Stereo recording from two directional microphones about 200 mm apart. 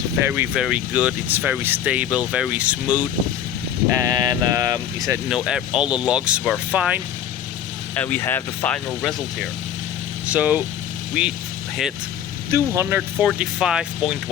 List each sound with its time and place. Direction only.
0.3 s speech: 5° right (ahead or behind)
5.3 s speech: 5° right (ahead or behind)
7.9 s speech: 10° left (ahead or behind)
10.2 s speech: 5° right (ahead or behind)
12.5 s speech: 15° right (ahead or behind)